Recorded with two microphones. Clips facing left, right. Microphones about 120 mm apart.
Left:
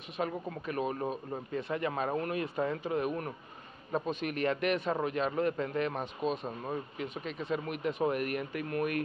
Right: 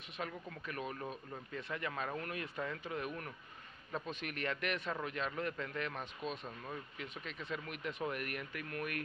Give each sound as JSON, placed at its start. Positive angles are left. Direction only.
{"t": 0.2, "sound": "speech", "side_deg": 30}
{"t": 4.1, "sound": "speech", "side_deg": 20}